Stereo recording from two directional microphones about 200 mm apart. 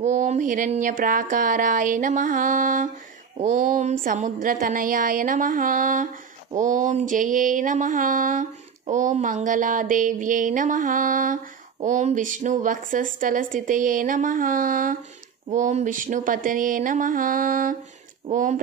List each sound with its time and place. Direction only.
0.0 s mantra: 35° right (ahead or behind)